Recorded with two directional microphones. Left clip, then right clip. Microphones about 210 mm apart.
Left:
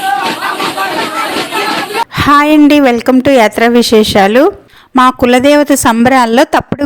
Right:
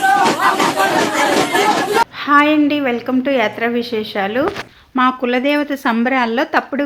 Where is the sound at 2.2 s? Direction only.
55° left (ahead or behind).